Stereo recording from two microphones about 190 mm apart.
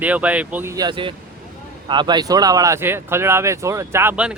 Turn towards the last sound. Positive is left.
turn(degrees=-10)  # may be behind; listen again after turning